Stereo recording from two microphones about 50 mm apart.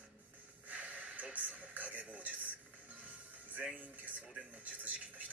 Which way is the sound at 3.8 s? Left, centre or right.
Right.